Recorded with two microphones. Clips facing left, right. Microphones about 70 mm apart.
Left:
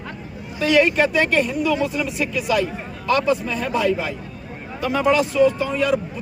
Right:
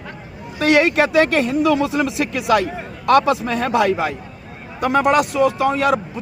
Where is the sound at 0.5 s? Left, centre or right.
Right.